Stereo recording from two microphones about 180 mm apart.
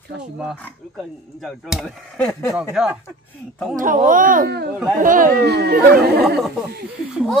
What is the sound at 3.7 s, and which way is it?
Speech, 45° right (ahead or behind).